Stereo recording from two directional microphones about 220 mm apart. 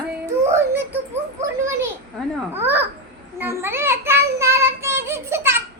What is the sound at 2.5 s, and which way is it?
Child singing, 10° right (ahead or behind).